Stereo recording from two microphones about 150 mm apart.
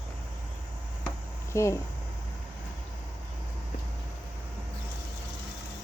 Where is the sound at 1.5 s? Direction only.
20° left (ahead or behind).